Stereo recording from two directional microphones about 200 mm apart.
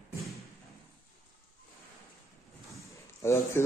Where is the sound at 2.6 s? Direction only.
15° left (ahead or behind).